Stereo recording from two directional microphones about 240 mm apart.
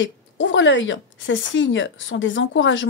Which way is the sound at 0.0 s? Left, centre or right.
Left.